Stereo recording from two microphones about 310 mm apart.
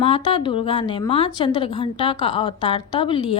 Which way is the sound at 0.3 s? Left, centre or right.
Centre.